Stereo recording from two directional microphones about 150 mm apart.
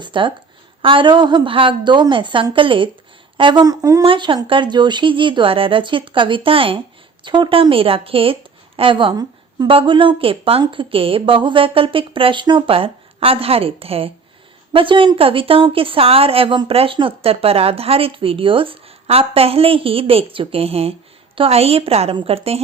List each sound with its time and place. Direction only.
0.0 s speech: 35° right (ahead or behind)
4.0 s speech: 35° right (ahead or behind)